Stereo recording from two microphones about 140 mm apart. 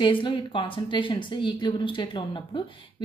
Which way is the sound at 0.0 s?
35° left (ahead or behind).